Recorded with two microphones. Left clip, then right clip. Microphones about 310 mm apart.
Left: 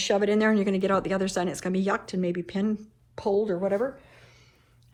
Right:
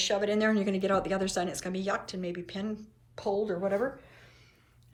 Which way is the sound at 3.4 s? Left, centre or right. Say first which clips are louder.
Left 4 dB; left.